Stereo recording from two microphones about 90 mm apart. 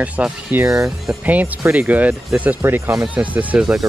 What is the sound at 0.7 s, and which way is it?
Speech, 35° right (ahead or behind).